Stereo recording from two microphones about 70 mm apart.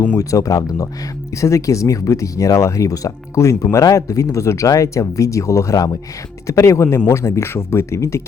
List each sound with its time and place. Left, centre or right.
0.2 s speech: left
6.5 s speech: left